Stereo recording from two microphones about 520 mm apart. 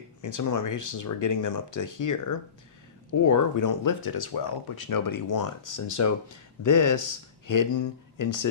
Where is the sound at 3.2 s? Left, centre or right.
Left.